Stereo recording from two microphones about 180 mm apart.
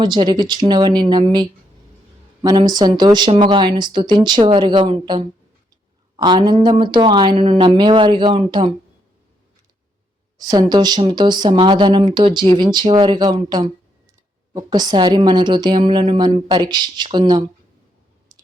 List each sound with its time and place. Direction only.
0.0 s speech: 25° right (ahead or behind)
10.3 s speech: 20° right (ahead or behind)